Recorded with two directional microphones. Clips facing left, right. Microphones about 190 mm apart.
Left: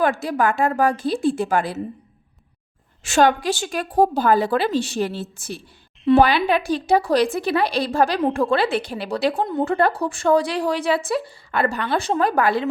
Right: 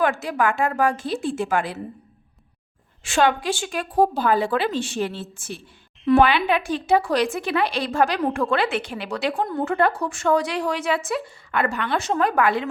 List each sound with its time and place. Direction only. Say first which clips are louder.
0.0 s speech: left 2 dB; 35° left (ahead or behind)
3.0 s speech: left 3 dB; 40° left (ahead or behind)
9.3 s speech: left 2 dB; 20° left (ahead or behind)
9.6 s speech: even; 35° left (ahead or behind)